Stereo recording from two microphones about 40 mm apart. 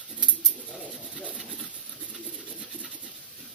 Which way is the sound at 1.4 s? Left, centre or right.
Centre.